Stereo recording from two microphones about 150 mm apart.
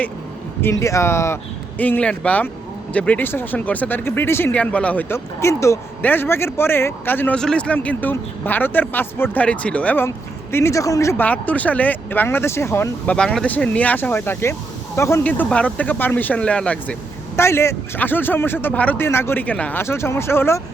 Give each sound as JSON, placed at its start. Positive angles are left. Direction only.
{"t": 0.6, "sound": "speech", "side_deg": 20}
{"t": 13.1, "sound": "speech", "side_deg": 5}